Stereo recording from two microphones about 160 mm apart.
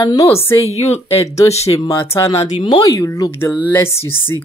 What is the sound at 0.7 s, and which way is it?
Speech, 40° left (ahead or behind).